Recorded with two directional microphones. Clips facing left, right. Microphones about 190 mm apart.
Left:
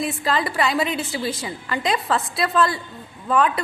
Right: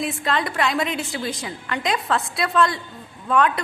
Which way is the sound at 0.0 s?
Centre (ahead or behind).